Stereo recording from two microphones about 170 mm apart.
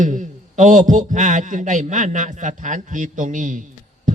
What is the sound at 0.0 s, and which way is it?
A man's voice, 50° right (ahead or behind).